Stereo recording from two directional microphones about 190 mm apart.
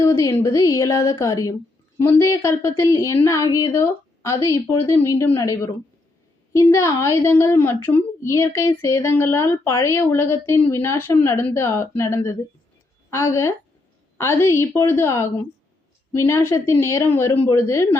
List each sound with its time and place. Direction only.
0.0 s a woman's voice: 15° left (ahead or behind)